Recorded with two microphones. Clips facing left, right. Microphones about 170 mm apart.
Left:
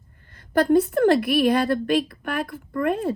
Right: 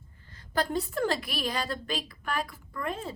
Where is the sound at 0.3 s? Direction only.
55° left (ahead or behind).